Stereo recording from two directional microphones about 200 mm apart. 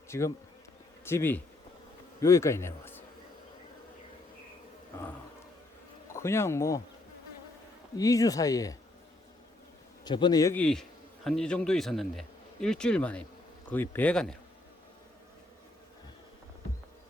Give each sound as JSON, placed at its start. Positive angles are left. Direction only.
{"t": 0.1, "sound": "bee", "side_deg": 15}
{"t": 1.0, "sound": "a man's voice", "side_deg": 10}
{"t": 6.1, "sound": "speech", "side_deg": 15}
{"t": 7.9, "sound": "speech", "side_deg": 15}
{"t": 10.0, "sound": "a man's voice", "side_deg": 20}